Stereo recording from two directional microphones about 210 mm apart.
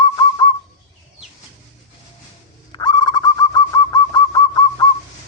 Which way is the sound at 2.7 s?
20° left (ahead or behind).